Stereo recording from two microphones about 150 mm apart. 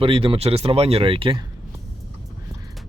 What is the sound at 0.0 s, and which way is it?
Speech, 35° right (ahead or behind).